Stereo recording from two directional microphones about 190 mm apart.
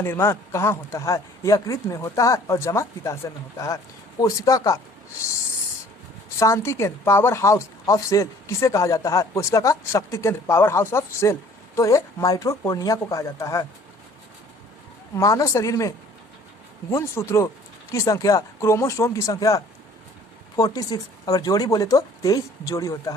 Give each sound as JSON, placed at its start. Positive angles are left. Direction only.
{"t": 0.0, "sound": "speech", "side_deg": 15}
{"t": 6.4, "sound": "speech", "side_deg": 15}
{"t": 15.1, "sound": "speech", "side_deg": 15}